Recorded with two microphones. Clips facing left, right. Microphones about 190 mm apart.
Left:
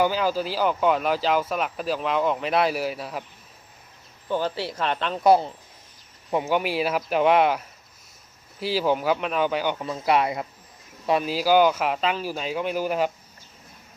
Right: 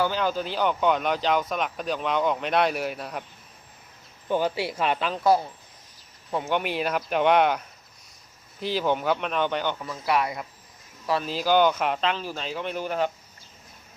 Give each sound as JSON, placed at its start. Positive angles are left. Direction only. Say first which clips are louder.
{"t": 0.0, "sound": "speech", "louder": "left 3 dB", "side_deg": 5}
{"t": 4.3, "sound": "speech", "louder": "right 1 dB", "side_deg": -15}
{"t": 5.2, "sound": "speech", "louder": "left 4 dB", "side_deg": 25}
{"t": 6.4, "sound": "speech", "louder": "left 2 dB", "side_deg": 5}
{"t": 9.8, "sound": "speech", "louder": "left 3 dB", "side_deg": 25}
{"t": 11.2, "sound": "speech", "louder": "left 2 dB", "side_deg": 10}